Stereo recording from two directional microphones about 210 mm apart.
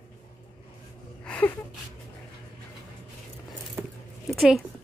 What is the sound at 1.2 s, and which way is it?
Gasp, 5° left (ahead or behind).